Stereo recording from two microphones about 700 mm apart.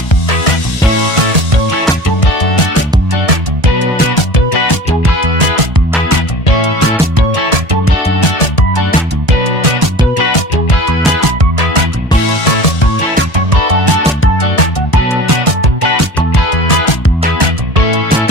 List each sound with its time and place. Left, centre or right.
1.1 s music: right
4.1 s music: left
7.3 s music: right
12.5 s music: left
13.5 s music: right
16.5 s music: left